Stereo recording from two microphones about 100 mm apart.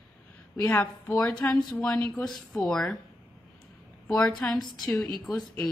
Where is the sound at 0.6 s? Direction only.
20° left (ahead or behind).